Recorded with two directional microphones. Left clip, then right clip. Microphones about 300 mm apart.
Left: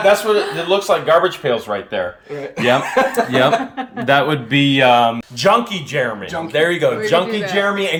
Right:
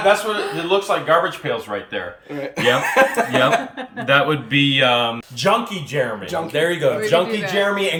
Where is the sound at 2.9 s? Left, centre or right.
Right.